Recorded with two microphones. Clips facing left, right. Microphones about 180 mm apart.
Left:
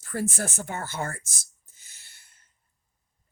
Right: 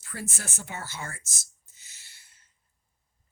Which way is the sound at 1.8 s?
55° left (ahead or behind).